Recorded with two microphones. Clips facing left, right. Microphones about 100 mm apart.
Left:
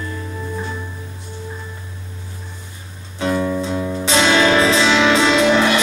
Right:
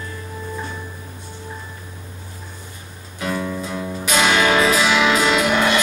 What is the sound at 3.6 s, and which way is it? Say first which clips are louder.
Music: left 5 dB; 25° left (ahead or behind).